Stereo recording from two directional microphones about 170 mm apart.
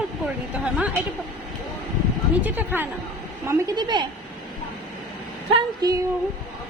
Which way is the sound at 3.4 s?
20° right (ahead or behind).